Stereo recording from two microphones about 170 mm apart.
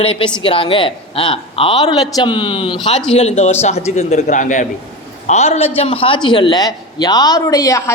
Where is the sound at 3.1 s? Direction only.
40° left (ahead or behind); by 7.9 s 20° left (ahead or behind).